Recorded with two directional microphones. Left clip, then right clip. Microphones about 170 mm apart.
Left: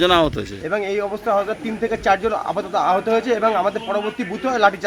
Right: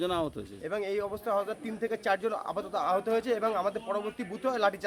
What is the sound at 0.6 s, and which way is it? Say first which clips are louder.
A man's voice: left 10 dB; 25° right (ahead or behind).